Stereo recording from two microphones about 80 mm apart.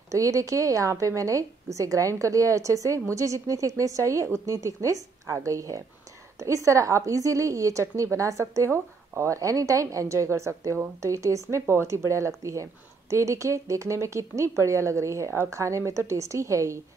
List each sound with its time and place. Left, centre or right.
0.1 s a woman's voice: right